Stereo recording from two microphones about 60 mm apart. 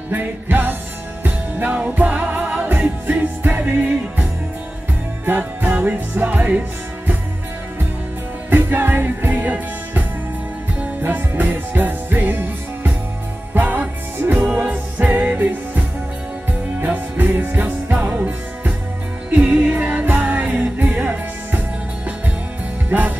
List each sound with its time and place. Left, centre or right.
0.1 s music: right
5.2 s music: right
8.5 s music: right
16.8 s music: right